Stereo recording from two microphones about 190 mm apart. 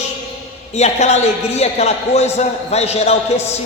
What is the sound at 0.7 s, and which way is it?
A man's voice, 35° left (ahead or behind).